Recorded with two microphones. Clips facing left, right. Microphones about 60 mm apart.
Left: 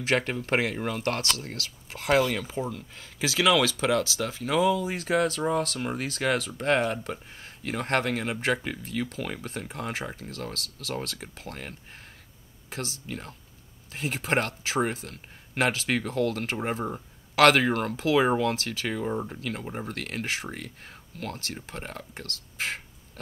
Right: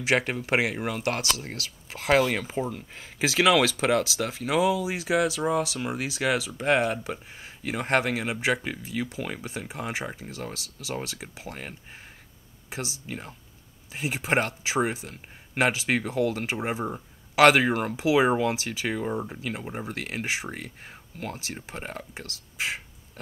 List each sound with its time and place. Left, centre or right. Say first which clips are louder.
0.0 s speech: right 1 dB; centre